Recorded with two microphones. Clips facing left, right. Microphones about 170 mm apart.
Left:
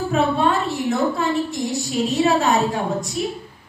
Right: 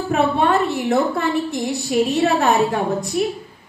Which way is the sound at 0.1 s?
60° right (ahead or behind).